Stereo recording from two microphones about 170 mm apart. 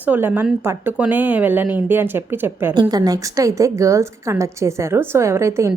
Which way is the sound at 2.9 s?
20° right (ahead or behind).